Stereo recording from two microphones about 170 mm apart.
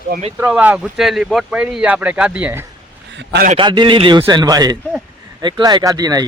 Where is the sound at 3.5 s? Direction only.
25° right (ahead or behind).